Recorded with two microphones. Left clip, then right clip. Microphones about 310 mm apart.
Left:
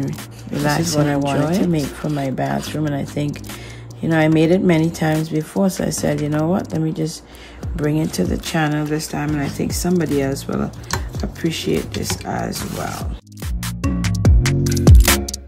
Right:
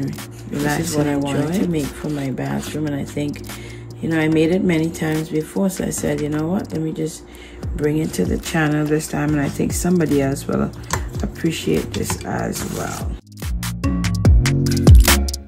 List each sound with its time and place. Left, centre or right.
0.9 s speech: centre
13.6 s music: centre